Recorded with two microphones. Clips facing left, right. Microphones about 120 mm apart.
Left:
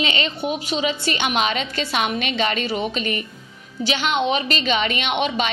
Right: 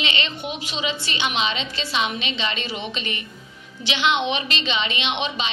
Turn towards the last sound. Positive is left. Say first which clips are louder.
# left 4 dB
turn(degrees=50)  # may be behind; listen again after turning